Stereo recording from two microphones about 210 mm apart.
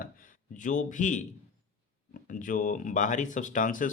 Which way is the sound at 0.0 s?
40° left (ahead or behind).